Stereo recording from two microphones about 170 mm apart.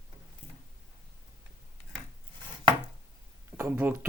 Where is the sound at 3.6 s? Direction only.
10° right (ahead or behind).